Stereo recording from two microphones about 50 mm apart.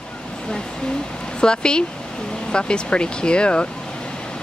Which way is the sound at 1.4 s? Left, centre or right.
Centre.